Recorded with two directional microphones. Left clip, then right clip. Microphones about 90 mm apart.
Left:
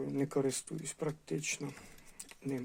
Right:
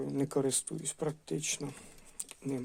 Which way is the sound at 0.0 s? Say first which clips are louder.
Right 2 dB; 15° right (ahead or behind).